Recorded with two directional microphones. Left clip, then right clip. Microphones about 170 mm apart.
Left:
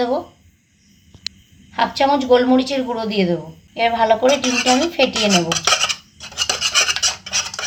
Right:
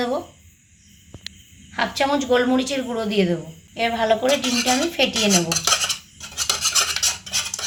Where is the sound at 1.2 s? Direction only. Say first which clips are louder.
Left 7 dB; 15° left (ahead or behind).